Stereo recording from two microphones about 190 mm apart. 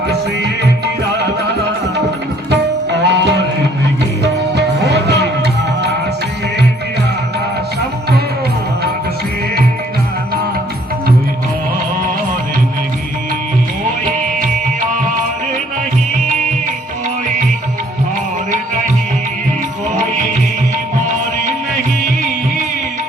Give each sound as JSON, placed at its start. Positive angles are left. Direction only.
{"t": 2.5, "sound": "music", "side_deg": -65}